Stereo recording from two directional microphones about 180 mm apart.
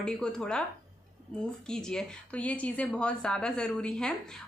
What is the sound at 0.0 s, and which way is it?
Speech, 5° left (ahead or behind).